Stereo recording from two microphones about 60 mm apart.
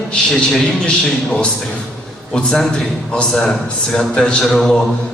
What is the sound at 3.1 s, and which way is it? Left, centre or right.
A man's voice, centre.